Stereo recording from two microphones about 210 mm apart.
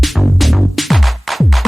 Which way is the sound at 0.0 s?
Centre (ahead or behind).